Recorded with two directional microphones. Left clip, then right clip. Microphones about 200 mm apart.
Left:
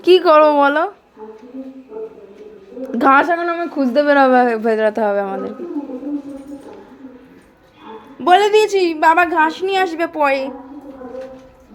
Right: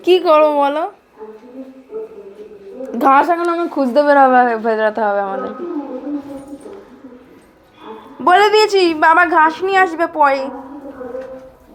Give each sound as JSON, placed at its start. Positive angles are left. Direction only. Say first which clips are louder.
{"t": 0.0, "sound": "a woman's voice", "louder": "left 1 dB", "side_deg": 25}
{"t": 3.0, "sound": "a woman's voice", "louder": "right 1 dB", "side_deg": 15}
{"t": 4.2, "sound": "a woman's voice", "louder": "right 2 dB", "side_deg": 35}
{"t": 8.2, "sound": "a woman's voice", "louder": "right 1 dB", "side_deg": 0}